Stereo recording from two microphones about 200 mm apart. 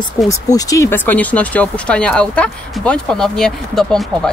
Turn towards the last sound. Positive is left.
turn(degrees=0)  # may be behind; listen again after turning